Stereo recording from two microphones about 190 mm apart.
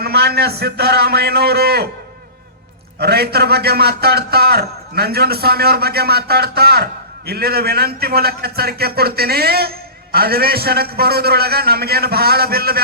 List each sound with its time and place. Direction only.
0.0 s a man's voice: 60° right (ahead or behind)
3.0 s a man's voice: 55° right (ahead or behind)